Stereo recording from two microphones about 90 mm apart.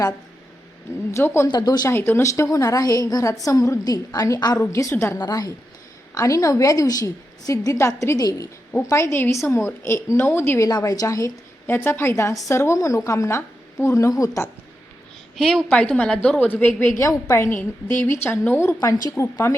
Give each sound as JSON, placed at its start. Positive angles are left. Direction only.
{"t": 1.1, "sound": "a woman's voice", "side_deg": 30}
{"t": 1.5, "sound": "speech", "side_deg": 50}
{"t": 1.9, "sound": "a woman's voice", "side_deg": 25}
{"t": 4.5, "sound": "a woman's voice", "side_deg": 30}
{"t": 5.1, "sound": "a woman's voice", "side_deg": 45}
{"t": 10.7, "sound": "a woman's voice", "side_deg": 45}
{"t": 11.6, "sound": "a woman's voice", "side_deg": 25}
{"t": 15.4, "sound": "a woman's voice", "side_deg": 5}
{"t": 16.5, "sound": "a woman's voice", "side_deg": 20}
{"t": 17.0, "sound": "a woman's voice", "side_deg": 35}